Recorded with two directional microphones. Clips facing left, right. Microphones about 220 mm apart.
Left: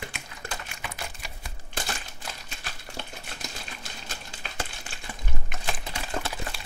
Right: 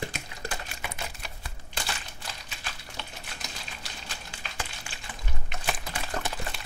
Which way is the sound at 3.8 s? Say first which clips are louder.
Left 2 dB; 45° left (ahead or behind).